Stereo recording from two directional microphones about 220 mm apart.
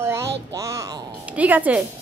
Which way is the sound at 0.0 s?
15° right (ahead or behind).